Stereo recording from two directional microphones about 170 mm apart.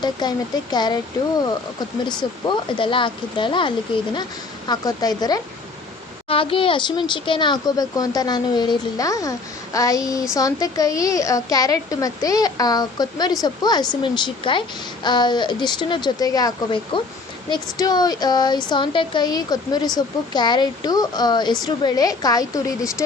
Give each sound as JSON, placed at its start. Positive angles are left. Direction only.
{"t": 0.0, "sound": "speech", "side_deg": 25}
{"t": 2.5, "sound": "speech", "side_deg": 30}